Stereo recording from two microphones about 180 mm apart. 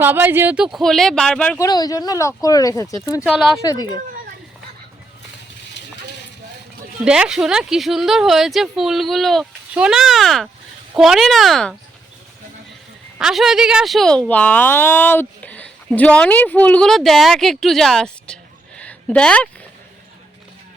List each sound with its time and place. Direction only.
0.0 s speech: 10° right (ahead or behind)
1.5 s speech: 20° left (ahead or behind)
7.0 s speech: 5° right (ahead or behind)
13.1 s speech: centre (ahead or behind)
18.8 s a sound: 5° left (ahead or behind)